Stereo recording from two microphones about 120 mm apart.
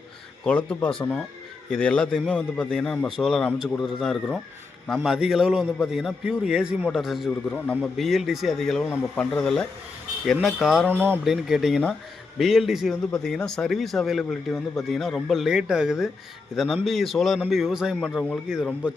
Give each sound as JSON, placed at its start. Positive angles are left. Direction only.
{"t": 0.4, "sound": "a man's voice", "side_deg": 10}
{"t": 7.5, "sound": "speech", "side_deg": 10}
{"t": 7.9, "sound": "a man's voice", "side_deg": 0}
{"t": 10.8, "sound": "speech", "side_deg": -15}
{"t": 11.2, "sound": "a man's voice", "side_deg": -5}